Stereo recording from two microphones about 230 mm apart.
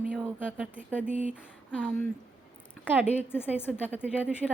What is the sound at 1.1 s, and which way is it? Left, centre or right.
Speech, right.